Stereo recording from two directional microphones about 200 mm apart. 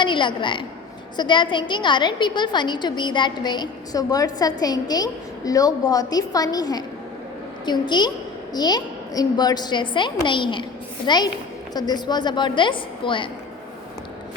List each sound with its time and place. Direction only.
0.0 s a woman's voice: 25° left (ahead or behind)